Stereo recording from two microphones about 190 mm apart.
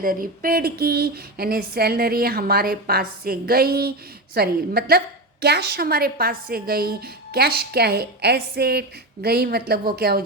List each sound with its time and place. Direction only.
0.0 s a woman's voice: 50° right (ahead or behind)